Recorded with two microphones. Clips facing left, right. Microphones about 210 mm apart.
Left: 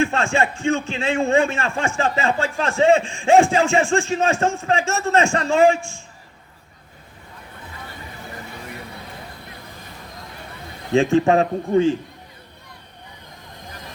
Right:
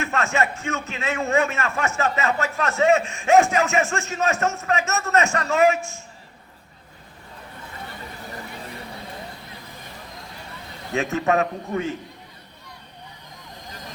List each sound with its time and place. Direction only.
0.0 s a man's voice: 30° left (ahead or behind)
10.9 s a man's voice: 30° left (ahead or behind)